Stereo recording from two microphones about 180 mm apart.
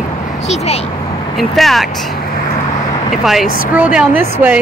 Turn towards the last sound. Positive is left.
turn(degrees=-10)  # may be behind; listen again after turning